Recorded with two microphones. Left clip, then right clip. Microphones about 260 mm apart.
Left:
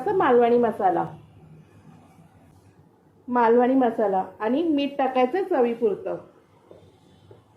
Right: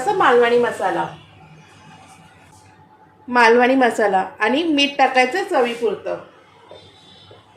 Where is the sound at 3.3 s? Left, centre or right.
Centre.